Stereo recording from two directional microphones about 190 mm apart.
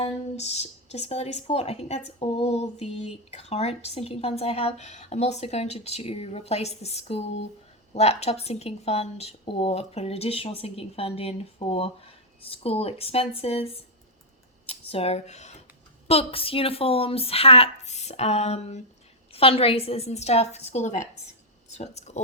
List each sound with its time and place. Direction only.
0.0 s speech: 35° left (ahead or behind)